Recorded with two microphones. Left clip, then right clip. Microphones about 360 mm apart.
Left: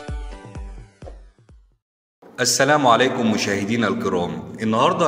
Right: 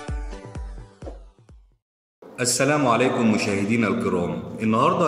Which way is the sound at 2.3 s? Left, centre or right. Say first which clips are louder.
Left 4 dB; left.